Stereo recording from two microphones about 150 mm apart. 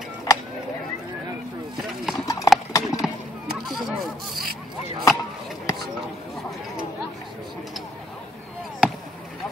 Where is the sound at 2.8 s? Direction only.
Centre (ahead or behind).